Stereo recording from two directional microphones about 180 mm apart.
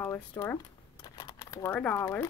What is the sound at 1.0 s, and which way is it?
Crumpling, 20° left (ahead or behind).